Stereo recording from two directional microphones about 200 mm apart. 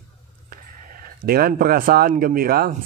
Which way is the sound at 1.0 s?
50° right (ahead or behind).